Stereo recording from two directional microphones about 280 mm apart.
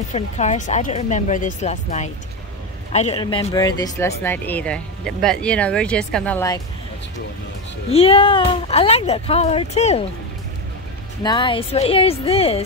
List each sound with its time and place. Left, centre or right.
0.1 s speech: left; by 6.6 s centre
7.9 s speech: left
11.2 s speech: centre